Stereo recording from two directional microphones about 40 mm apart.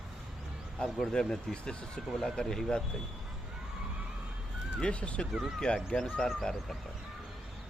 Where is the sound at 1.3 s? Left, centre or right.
Centre.